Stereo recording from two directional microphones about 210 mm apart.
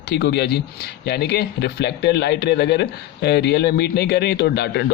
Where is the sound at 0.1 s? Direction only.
50° left (ahead or behind).